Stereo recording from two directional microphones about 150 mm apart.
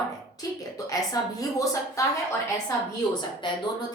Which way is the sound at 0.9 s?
25° left (ahead or behind).